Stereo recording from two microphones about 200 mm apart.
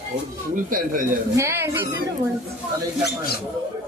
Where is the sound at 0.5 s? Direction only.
45° right (ahead or behind).